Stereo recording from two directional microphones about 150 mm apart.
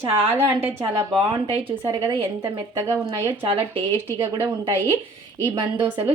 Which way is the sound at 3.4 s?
35° right (ahead or behind).